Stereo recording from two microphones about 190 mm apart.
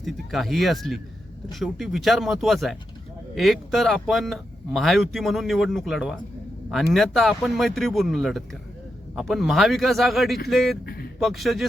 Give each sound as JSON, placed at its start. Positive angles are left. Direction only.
{"t": 0.0, "sound": "speech", "side_deg": 0}
{"t": 10.8, "sound": "a sound", "side_deg": 55}
{"t": 11.2, "sound": "speech", "side_deg": 0}